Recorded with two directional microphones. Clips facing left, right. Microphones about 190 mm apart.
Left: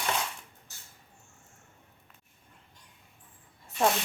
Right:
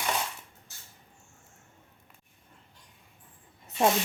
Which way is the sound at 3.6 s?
20° right (ahead or behind).